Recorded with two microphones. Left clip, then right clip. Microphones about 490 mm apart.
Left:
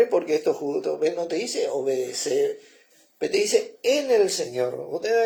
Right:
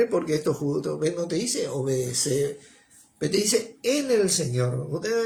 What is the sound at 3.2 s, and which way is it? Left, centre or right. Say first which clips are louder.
Speech: left 2 dB; centre.